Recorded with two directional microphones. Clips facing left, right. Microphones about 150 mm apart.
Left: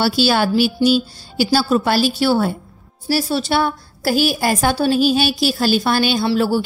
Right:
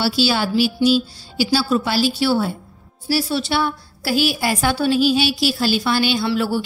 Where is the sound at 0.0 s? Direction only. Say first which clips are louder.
Left 3 dB; 55° left (ahead or behind).